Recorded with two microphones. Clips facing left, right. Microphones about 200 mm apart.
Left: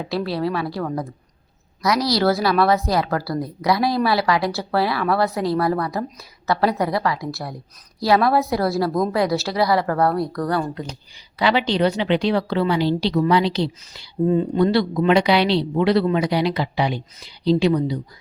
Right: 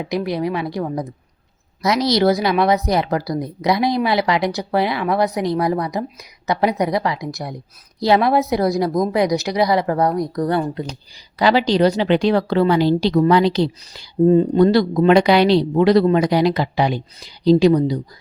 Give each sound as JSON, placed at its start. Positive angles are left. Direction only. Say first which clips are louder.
{"t": 0.0, "sound": "a woman's voice", "louder": "right 2 dB", "side_deg": -15}
{"t": 11.3, "sound": "a woman's voice", "louder": "right 4 dB", "side_deg": -40}